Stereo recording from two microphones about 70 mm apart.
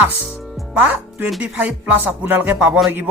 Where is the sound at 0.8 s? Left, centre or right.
Right.